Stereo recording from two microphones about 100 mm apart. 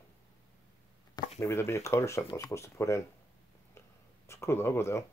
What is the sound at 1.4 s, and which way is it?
Speech, 30° left (ahead or behind).